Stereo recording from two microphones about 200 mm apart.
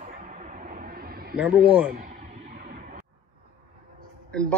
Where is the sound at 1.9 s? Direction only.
45° right (ahead or behind).